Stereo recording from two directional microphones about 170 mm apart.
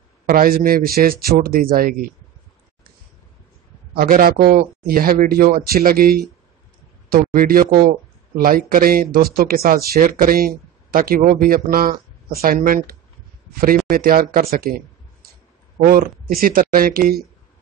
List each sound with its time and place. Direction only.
0.3 s speech: 55° right (ahead or behind)
3.9 s speech: 55° right (ahead or behind)
15.8 s speech: 60° right (ahead or behind)